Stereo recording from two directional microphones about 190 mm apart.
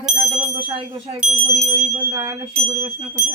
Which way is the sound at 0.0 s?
10° right (ahead or behind).